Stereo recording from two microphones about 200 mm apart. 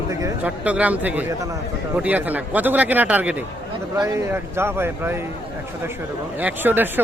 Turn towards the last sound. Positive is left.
turn(degrees=-10)  # may be behind; listen again after turning